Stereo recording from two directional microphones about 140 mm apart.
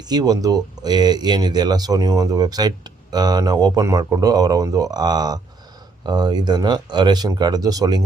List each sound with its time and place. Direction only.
0.0 s speech: 30° right (ahead or behind)